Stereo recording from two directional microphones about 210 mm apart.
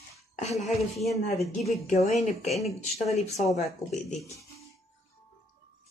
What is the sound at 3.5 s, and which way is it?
Speech, 30° left (ahead or behind).